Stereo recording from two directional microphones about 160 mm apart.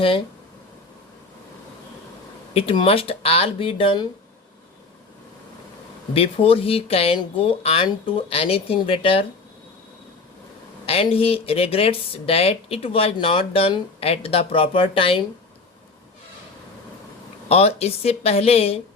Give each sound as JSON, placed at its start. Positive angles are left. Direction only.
{"t": 2.5, "sound": "speech", "side_deg": 35}
{"t": 6.1, "sound": "speech", "side_deg": 35}
{"t": 10.8, "sound": "speech", "side_deg": 35}
{"t": 17.5, "sound": "speech", "side_deg": 40}